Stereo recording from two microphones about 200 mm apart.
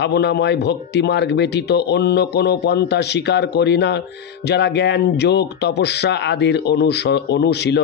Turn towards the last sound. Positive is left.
turn(degrees=60)  # may be behind; listen again after turning